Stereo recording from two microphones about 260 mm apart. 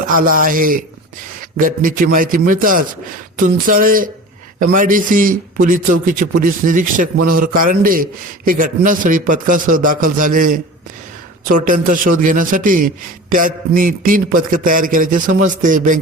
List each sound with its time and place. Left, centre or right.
0.1 s a man's voice: right
1.4 s a sound: right
2.0 s a man's voice: right